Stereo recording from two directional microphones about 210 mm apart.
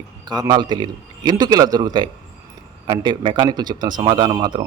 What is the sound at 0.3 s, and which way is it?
A man's voice, 20° right (ahead or behind).